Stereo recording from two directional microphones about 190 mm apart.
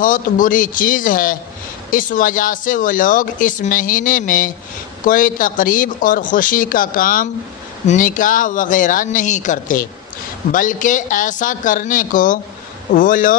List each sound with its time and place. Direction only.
0.0 s speech: 45° left (ahead or behind)